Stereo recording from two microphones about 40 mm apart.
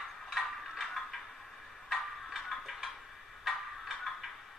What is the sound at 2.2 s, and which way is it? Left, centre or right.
Tick-tock, centre.